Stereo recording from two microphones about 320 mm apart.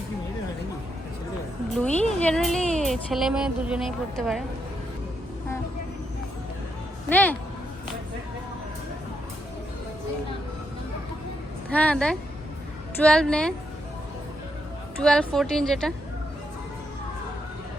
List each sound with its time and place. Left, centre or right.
1.7 s speech: centre
7.1 s speech: centre
11.7 s speech: centre
15.0 s speech: centre